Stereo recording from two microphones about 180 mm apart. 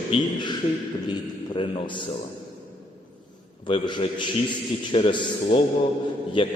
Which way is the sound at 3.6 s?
25° left (ahead or behind).